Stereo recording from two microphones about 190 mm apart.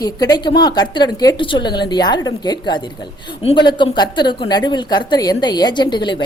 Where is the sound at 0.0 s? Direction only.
20° left (ahead or behind).